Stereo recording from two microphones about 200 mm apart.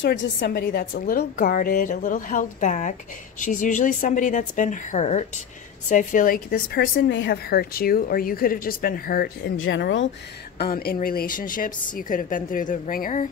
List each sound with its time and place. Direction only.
0.0 s a woman's voice: 60° left (ahead or behind)
7.0 s a woman's voice: 65° left (ahead or behind); by 9.5 s 50° left (ahead or behind)
9.6 s speech: 60° left (ahead or behind)
10.6 s a woman's voice: 50° left (ahead or behind)